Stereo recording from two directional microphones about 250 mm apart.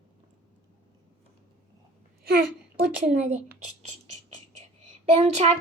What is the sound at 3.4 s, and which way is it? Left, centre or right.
Speech, right.